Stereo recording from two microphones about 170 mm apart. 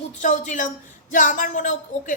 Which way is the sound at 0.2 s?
45° left (ahead or behind).